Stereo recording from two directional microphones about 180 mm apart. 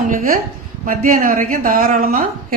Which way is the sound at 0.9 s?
50° right (ahead or behind).